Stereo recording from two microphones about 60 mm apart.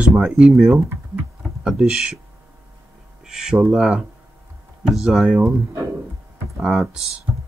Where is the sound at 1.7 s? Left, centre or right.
Centre.